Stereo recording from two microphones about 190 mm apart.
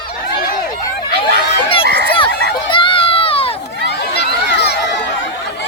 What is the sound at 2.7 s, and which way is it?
Run, 30° left (ahead or behind).